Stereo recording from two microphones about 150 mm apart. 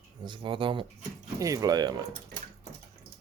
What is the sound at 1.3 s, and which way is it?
Speech, 20° right (ahead or behind).